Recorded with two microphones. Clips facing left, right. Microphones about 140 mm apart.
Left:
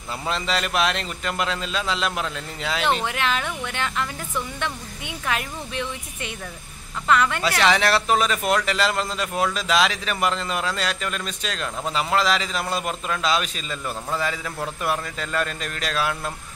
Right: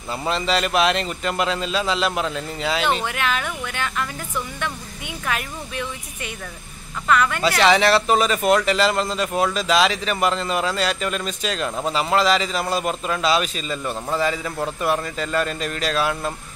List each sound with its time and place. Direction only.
0.1 s a man's voice: centre (ahead or behind)
3.1 s speech: 25° left (ahead or behind)
7.4 s a man's voice: centre (ahead or behind)